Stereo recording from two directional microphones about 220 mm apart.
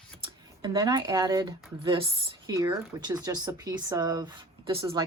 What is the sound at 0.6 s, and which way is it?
A woman's voice, 20° right (ahead or behind).